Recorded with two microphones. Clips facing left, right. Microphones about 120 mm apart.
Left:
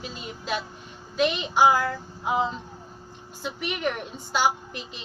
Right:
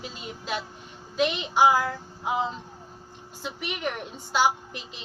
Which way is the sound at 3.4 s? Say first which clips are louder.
Left 3 dB; 15° right (ahead or behind).